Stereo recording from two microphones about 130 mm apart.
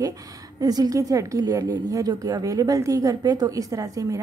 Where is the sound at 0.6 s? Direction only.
30° right (ahead or behind).